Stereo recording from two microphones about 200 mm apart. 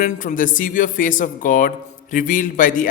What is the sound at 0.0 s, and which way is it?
Speech, 40° left (ahead or behind).